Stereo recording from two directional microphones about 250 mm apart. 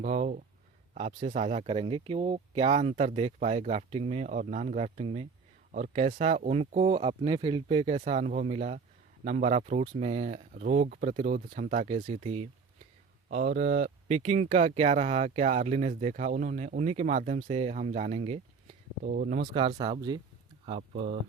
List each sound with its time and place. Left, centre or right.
0.0 s speech: right
19.5 s speech: centre